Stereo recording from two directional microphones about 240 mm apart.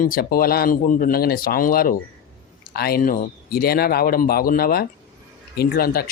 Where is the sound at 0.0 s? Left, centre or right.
Left.